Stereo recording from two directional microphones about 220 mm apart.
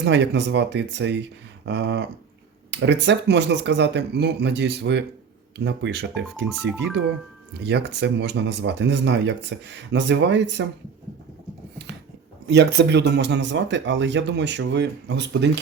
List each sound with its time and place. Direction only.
0.0 s speech: 50° right (ahead or behind)
6.2 s speech: 5° right (ahead or behind)
7.6 s speech: 50° right (ahead or behind)
12.5 s speech: 50° right (ahead or behind)